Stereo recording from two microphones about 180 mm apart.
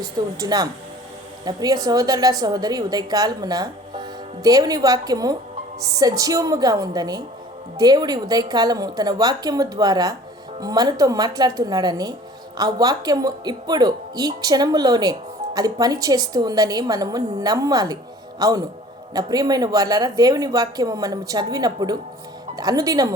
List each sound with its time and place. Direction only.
0.3 s a woman's voice: 20° right (ahead or behind)